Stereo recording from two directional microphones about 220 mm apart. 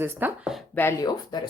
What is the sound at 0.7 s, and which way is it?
Speech, 10° left (ahead or behind).